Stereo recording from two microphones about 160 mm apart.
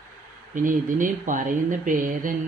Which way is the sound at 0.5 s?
55° right (ahead or behind).